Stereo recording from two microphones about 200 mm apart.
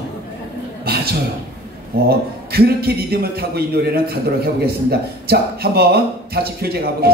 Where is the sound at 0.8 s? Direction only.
50° right (ahead or behind).